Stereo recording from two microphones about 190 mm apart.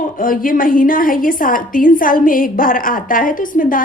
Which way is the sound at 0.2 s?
45° left (ahead or behind).